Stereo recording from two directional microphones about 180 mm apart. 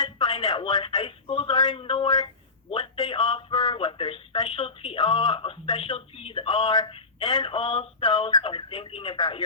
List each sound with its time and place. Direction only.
0.0 s speech: 25° left (ahead or behind)